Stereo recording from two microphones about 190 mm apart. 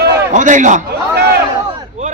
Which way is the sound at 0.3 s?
40° right (ahead or behind).